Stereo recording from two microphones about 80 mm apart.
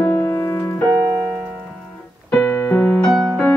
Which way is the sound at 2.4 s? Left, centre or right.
Left.